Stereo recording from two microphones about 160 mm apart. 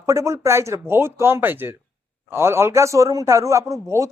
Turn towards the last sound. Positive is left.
turn(degrees=-20)  # may be behind; listen again after turning